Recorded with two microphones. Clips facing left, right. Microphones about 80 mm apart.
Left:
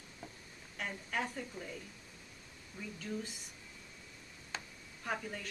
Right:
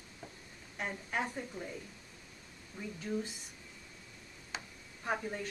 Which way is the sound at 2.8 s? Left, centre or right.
Centre.